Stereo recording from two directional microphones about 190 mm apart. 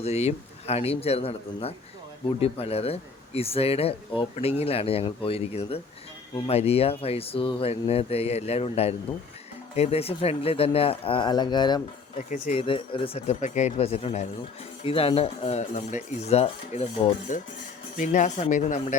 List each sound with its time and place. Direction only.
0.0 s speech: 35° left (ahead or behind)